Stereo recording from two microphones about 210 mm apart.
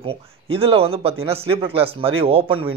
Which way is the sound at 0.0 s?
25° right (ahead or behind).